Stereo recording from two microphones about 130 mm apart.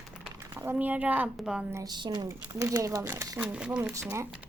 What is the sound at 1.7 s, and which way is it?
Speech, 30° right (ahead or behind).